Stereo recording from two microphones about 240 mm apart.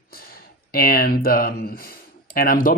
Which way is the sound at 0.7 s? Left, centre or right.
Left.